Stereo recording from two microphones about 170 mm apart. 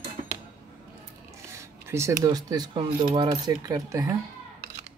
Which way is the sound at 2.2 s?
25° right (ahead or behind).